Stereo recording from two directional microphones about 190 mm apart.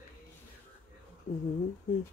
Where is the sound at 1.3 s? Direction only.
40° left (ahead or behind).